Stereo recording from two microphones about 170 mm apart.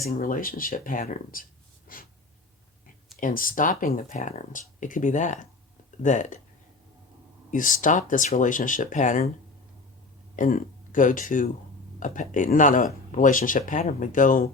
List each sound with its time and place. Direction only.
0.0 s speech: 55° left (ahead or behind)
1.9 s snort: 55° left (ahead or behind)
3.2 s speech: 55° left (ahead or behind)
7.5 s speech: 50° left (ahead or behind)
10.3 s speech: 50° left (ahead or behind)